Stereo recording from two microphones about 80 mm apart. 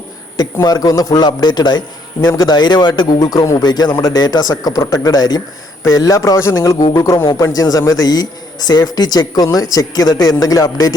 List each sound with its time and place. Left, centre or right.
0.6 s speech: left
2.2 s speech: left
3.7 s speech: left
5.8 s a man's voice: left
7.5 s a man's voice: left